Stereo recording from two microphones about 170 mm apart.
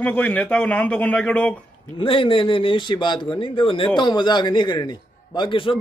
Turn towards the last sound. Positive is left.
turn(degrees=30)  # may be behind; listen again after turning